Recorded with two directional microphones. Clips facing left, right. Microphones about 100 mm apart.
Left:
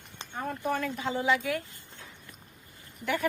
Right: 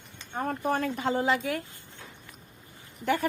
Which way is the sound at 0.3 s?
45° right (ahead or behind).